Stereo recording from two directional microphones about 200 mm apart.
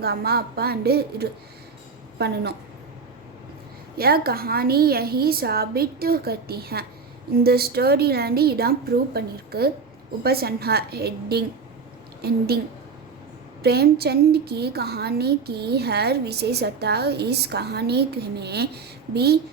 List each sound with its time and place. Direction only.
0.0 s a woman's voice: 50° right (ahead or behind)
3.9 s a woman's voice: 50° right (ahead or behind)
13.6 s a woman's voice: 50° right (ahead or behind)